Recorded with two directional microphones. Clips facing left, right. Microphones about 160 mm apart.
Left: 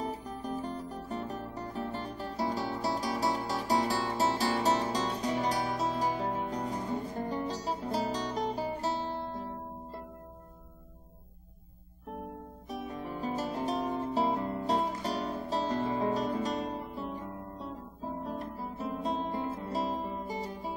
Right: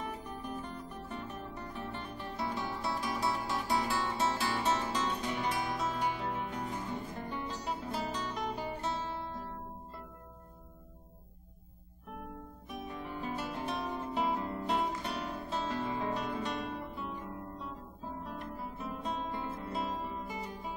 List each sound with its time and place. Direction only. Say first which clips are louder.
0.0 s music: left 4 dB; 35° left (ahead or behind)
12.6 s music: left 4 dB; 35° left (ahead or behind)
18.2 s guitar: left 4 dB; 35° left (ahead or behind)